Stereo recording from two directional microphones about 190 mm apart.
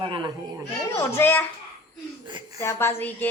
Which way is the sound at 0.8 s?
15° left (ahead or behind).